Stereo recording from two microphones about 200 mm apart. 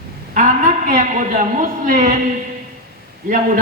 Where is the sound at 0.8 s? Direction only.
40° right (ahead or behind).